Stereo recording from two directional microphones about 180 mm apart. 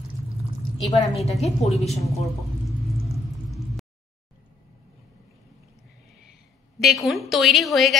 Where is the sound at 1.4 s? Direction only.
35° left (ahead or behind).